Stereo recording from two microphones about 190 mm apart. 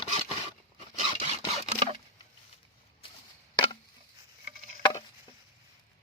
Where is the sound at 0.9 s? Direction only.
35° left (ahead or behind).